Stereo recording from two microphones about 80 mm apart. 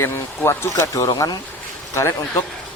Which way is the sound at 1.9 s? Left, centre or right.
Left.